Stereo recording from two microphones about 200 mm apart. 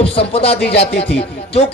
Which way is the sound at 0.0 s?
30° left (ahead or behind).